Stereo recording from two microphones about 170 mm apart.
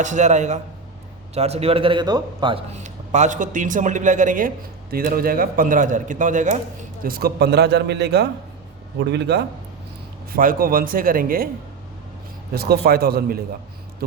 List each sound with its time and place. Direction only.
0.0 s a man's voice: 45° right (ahead or behind)
7.0 s a man's voice: 60° right (ahead or behind); by 9.4 s 85° right
10.3 s speech: 55° right (ahead or behind)
12.5 s speech: 65° right (ahead or behind)